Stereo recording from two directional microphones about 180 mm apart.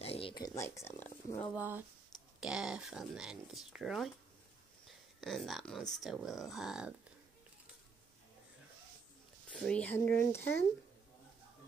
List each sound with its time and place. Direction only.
0.0 s a sound: 30° left (ahead or behind); by 1.5 s 15° left (ahead or behind)
1.5 s speech: 10° right (ahead or behind)
5.2 s speech: centre (ahead or behind)
9.5 s speech: 5° left (ahead or behind)